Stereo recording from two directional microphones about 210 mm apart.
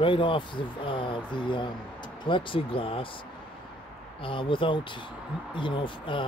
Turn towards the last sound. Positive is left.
turn(degrees=25)  # may be behind; listen again after turning